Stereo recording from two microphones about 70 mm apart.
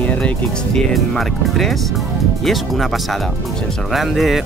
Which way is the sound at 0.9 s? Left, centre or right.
Centre.